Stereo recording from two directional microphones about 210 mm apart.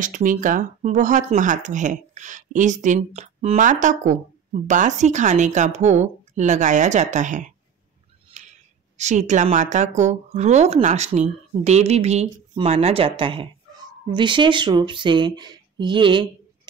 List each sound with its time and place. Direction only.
0.0 s speech: 40° right (ahead or behind); by 16.3 s 25° right (ahead or behind)